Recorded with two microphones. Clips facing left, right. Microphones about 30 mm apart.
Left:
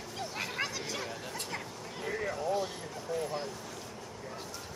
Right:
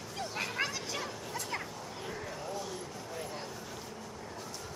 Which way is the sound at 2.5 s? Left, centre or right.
Left.